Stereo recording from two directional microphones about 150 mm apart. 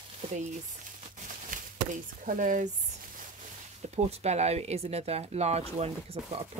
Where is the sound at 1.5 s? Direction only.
60° right (ahead or behind).